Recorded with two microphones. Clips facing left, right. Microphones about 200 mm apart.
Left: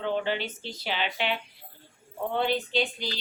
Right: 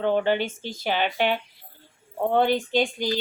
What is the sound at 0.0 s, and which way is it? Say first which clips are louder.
Speech: right 6 dB; 50° right (ahead or behind).